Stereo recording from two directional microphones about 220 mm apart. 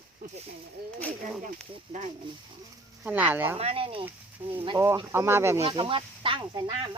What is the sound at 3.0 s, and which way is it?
Speech, 5° right (ahead or behind).